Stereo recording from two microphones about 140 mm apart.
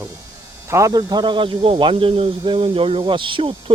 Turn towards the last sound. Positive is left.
turn(degrees=-35)  # may be behind; listen again after turning